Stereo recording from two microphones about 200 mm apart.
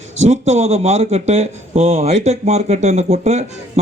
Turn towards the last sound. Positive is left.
turn(degrees=-35)  # may be behind; listen again after turning